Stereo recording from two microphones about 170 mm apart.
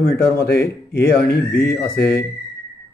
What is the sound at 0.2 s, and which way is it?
Speech, 65° left (ahead or behind).